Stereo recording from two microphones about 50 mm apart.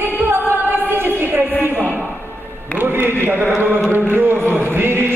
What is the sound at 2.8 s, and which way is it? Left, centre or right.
Chant, right.